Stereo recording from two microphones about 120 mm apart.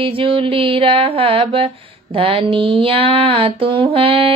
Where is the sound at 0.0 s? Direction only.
50° right (ahead or behind).